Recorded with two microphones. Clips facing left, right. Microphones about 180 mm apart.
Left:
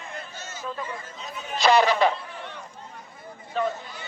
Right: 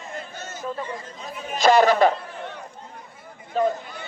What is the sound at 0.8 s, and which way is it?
Speech, 35° right (ahead or behind).